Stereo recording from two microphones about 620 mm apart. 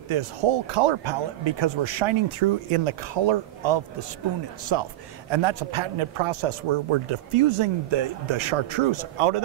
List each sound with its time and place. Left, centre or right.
0.1 s a man's voice: right